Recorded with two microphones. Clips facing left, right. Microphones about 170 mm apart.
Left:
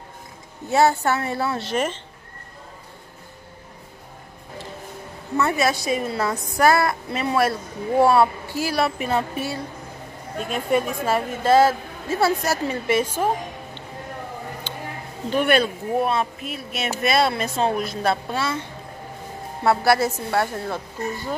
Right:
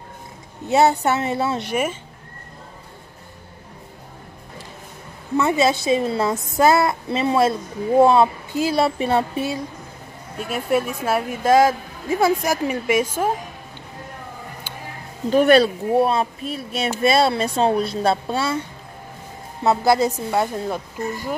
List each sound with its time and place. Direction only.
0.7 s a woman's voice: 20° right (ahead or behind)
5.4 s a woman's voice: 20° right (ahead or behind)
10.5 s a woman's voice: 5° right (ahead or behind)
15.2 s a woman's voice: 40° right (ahead or behind)
19.6 s a woman's voice: 20° right (ahead or behind)